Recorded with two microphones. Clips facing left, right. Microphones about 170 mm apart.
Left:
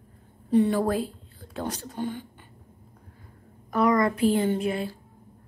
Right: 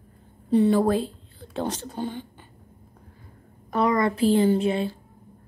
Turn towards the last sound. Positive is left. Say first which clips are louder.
# right 4 dB
turn(degrees=-25)  # may be behind; listen again after turning